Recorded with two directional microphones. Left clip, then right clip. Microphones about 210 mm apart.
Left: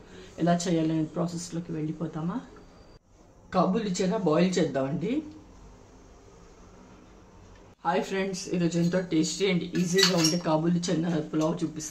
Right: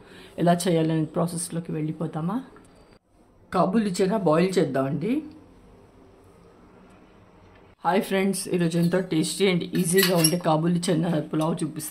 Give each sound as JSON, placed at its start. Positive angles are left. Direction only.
{"t": 0.1, "sound": "speech", "side_deg": -50}
{"t": 3.4, "sound": "speech", "side_deg": -40}
{"t": 7.8, "sound": "speech", "side_deg": -50}